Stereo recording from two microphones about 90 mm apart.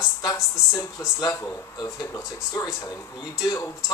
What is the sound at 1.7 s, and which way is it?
Speech, 45° left (ahead or behind).